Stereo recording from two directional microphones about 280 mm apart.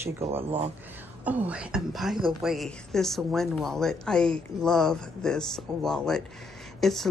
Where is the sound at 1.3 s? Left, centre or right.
Centre.